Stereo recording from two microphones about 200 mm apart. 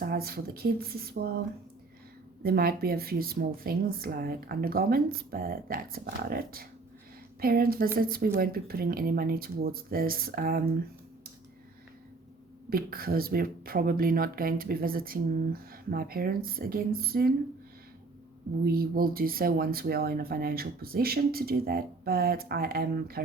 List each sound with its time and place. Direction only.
0.0 s speech: 50° right (ahead or behind)
2.4 s speech: 50° right (ahead or behind)
12.7 s speech: 50° right (ahead or behind)
18.6 s speech: 50° right (ahead or behind)